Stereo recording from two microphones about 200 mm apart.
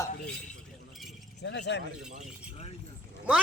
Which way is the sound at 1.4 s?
60° left (ahead or behind).